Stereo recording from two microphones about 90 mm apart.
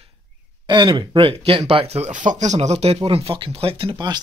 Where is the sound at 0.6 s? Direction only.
55° right (ahead or behind); by 1.6 s 90° right.